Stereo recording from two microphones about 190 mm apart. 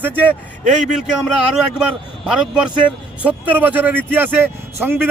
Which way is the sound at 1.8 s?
5° right (ahead or behind).